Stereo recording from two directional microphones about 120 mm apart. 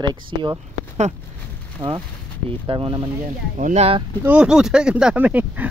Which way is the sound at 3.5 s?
80° right.